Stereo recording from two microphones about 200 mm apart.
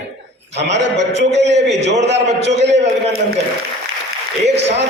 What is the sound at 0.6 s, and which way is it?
A man's voice, 60° right (ahead or behind).